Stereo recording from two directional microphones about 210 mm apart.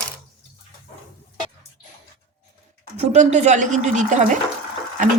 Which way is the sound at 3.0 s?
30° right (ahead or behind).